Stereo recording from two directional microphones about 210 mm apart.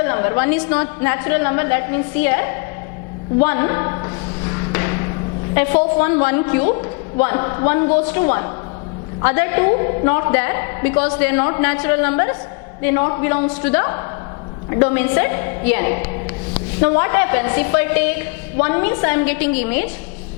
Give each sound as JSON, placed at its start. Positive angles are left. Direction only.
{"t": 0.0, "sound": "a woman's voice", "side_deg": 15}
{"t": 3.4, "sound": "a sound", "side_deg": 15}
{"t": 5.5, "sound": "a woman's voice", "side_deg": 10}